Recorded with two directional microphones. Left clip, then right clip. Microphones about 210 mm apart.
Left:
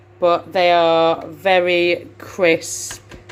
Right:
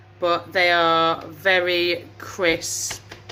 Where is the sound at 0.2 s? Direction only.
20° left (ahead or behind).